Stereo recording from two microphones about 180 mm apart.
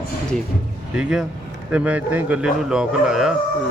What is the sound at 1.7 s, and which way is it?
A man's voice, 5° right (ahead or behind).